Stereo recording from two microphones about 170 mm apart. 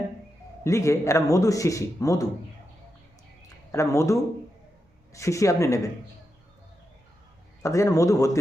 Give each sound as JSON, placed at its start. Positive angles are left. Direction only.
{"t": 0.6, "sound": "a man's voice", "side_deg": 15}
{"t": 3.7, "sound": "speech", "side_deg": 15}
{"t": 7.6, "sound": "a man's voice", "side_deg": 20}